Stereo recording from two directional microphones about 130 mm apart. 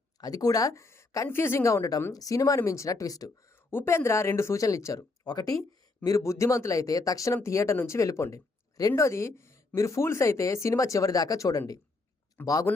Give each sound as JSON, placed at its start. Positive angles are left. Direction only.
{"t": 0.2, "sound": "speech", "side_deg": 30}
{"t": 12.4, "sound": "a man's voice", "side_deg": 15}